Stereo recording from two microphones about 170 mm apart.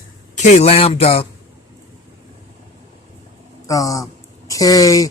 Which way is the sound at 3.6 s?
20° left (ahead or behind).